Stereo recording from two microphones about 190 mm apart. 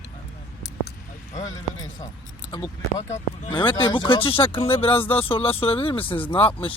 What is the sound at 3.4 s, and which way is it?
Speech, 30° left (ahead or behind).